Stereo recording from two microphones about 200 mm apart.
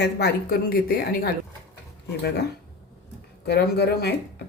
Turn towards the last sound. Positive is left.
turn(degrees=55)  # may be behind; listen again after turning